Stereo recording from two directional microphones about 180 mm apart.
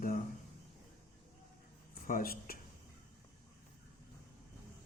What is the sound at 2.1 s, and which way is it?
Speech, 55° left (ahead or behind).